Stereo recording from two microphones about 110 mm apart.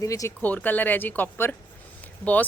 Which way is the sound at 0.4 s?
15° left (ahead or behind).